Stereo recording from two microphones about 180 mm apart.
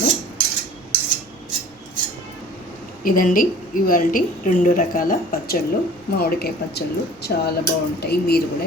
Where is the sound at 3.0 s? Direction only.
50° left (ahead or behind).